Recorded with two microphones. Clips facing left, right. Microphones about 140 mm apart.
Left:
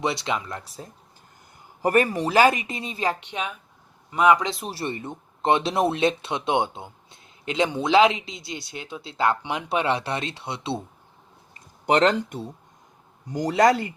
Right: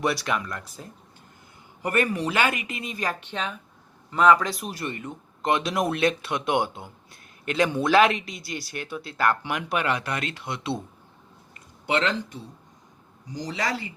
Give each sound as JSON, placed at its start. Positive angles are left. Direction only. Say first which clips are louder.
{"t": 0.0, "sound": "speech", "louder": "even", "side_deg": 20}
{"t": 11.9, "sound": "speech", "louder": "left 6 dB", "side_deg": 45}
{"t": 13.2, "sound": "speech", "louder": "left 11 dB", "side_deg": 55}